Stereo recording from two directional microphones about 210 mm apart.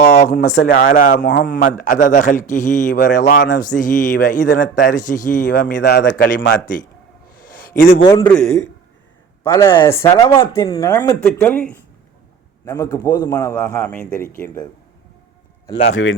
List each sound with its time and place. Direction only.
0.0 s a man's voice: 45° left (ahead or behind)
1.3 s a man's voice: 50° left (ahead or behind)
7.4 s a sound: 45° left (ahead or behind)
8.2 s a man's voice: 5° left (ahead or behind)
10.1 s speech: 25° left (ahead or behind)
10.4 s a man's voice: 15° left (ahead or behind)
15.9 s speech: 65° left (ahead or behind)